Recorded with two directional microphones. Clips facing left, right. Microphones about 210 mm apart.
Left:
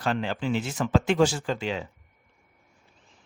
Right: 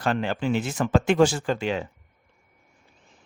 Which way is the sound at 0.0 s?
55° right (ahead or behind).